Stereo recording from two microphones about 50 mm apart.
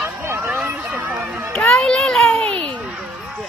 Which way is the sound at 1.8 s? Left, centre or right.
Centre.